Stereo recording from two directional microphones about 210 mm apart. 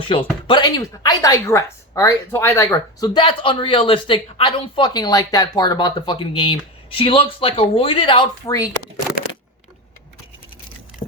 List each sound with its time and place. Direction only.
0.0 s speech: 25° left (ahead or behind)